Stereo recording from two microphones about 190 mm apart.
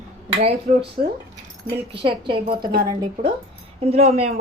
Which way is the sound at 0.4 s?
30° right (ahead or behind).